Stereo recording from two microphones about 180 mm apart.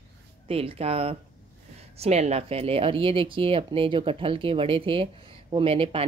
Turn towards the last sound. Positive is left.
turn(degrees=-30)  # may be behind; listen again after turning